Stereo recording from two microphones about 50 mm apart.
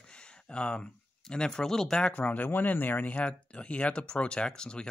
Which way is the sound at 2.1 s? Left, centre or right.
Left.